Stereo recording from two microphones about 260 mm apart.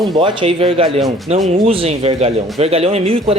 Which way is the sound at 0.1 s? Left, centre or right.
Right.